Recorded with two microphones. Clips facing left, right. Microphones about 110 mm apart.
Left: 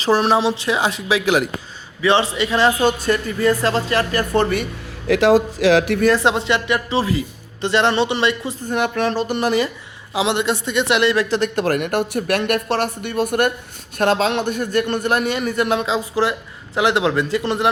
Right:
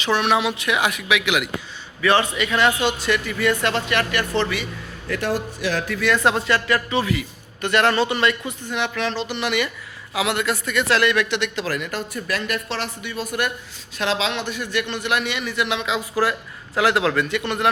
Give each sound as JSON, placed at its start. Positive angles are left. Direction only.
{"t": 0.0, "sound": "speech", "side_deg": 35}
{"t": 2.0, "sound": "speech", "side_deg": 25}
{"t": 4.4, "sound": "a man's voice", "side_deg": 50}
{"t": 5.0, "sound": "speech", "side_deg": 90}
{"t": 6.0, "sound": "speech", "side_deg": 35}
{"t": 6.2, "sound": "a man's voice", "side_deg": 20}
{"t": 8.7, "sound": "a man's voice", "side_deg": 45}
{"t": 10.2, "sound": "a man's voice", "side_deg": 25}
{"t": 11.6, "sound": "a man's voice", "side_deg": 60}
{"t": 15.9, "sound": "a man's voice", "side_deg": 25}